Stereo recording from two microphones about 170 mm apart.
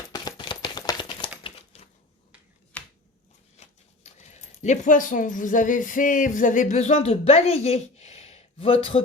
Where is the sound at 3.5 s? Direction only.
40° left (ahead or behind).